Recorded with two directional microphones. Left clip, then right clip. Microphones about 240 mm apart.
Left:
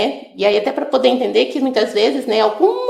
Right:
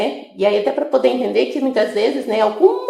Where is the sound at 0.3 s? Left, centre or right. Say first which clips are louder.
Even; left.